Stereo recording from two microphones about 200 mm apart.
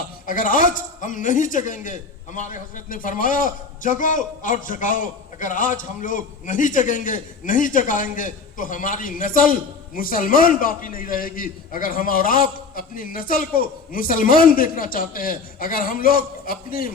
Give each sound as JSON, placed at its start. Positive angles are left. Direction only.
{"t": 0.3, "sound": "a man's voice", "side_deg": 45}